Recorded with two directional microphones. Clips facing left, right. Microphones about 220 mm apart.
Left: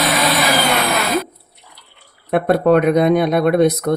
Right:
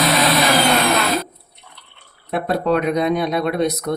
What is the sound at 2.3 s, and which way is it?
Speech, 55° left (ahead or behind).